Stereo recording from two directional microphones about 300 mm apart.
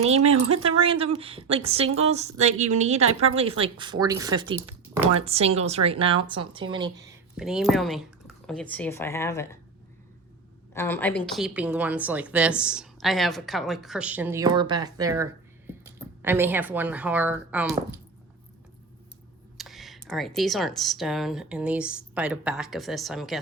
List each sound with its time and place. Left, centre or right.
0.0 s a woman's voice: right
7.3 s a woman's voice: centre
10.8 s a woman's voice: centre
19.5 s a woman's voice: centre